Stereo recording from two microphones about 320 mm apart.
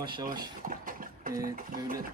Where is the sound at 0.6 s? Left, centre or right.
Right.